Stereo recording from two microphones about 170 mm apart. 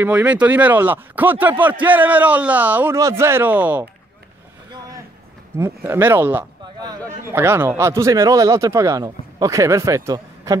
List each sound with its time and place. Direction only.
0.0 s speech: 10° right (ahead or behind)
5.6 s speech: 10° right (ahead or behind)